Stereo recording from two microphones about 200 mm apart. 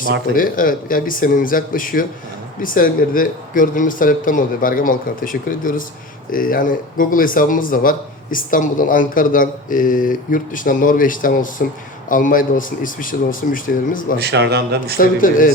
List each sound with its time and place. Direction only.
0.3 s speech: 45° left (ahead or behind)
14.2 s a man's voice: 55° right (ahead or behind)
14.9 s speech: 45° left (ahead or behind)